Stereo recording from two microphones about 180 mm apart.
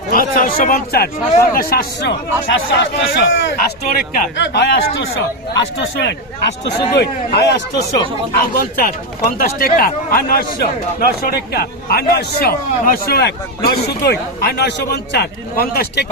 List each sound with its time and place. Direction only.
0.1 s speech: 50° left (ahead or behind); by 3.9 s 85° left
3.9 s speech: 55° left (ahead or behind)
4.4 s speech: 75° left (ahead or behind)
6.7 s a man's voice: 70° left (ahead or behind)